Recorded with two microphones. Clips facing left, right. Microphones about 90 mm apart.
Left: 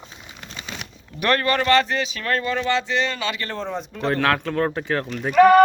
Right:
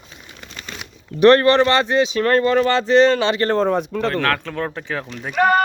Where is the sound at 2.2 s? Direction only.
40° right (ahead or behind); by 4.0 s 60° right (ahead or behind).